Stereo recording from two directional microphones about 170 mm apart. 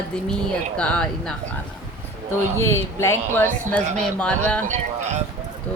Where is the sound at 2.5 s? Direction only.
15° left (ahead or behind).